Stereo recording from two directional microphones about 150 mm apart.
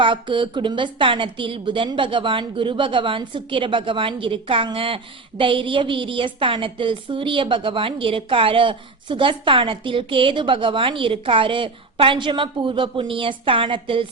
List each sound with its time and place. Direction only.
0.0 s a woman's voice: 35° right (ahead or behind)